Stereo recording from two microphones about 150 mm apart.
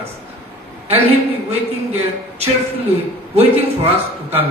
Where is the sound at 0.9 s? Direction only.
40° right (ahead or behind).